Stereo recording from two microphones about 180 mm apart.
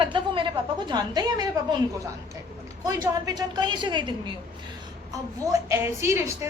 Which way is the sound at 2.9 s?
20° right (ahead or behind).